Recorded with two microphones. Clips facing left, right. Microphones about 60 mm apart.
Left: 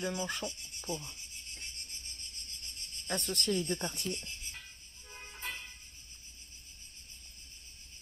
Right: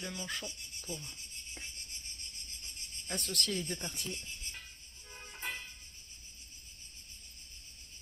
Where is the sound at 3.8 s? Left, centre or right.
Centre.